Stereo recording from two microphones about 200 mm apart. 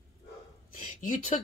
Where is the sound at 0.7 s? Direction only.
40° left (ahead or behind).